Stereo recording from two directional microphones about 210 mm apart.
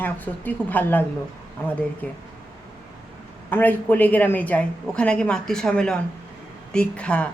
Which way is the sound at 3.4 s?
10° left (ahead or behind).